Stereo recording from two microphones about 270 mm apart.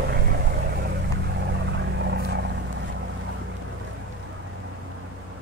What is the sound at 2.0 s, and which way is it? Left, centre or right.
Vehicle, right.